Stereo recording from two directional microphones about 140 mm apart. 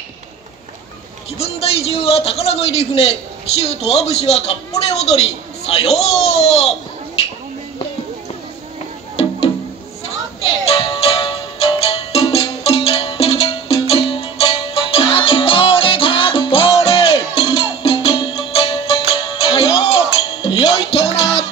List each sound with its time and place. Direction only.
1.4 s a man's voice: 45° left (ahead or behind)
10.7 s music: 45° left (ahead or behind)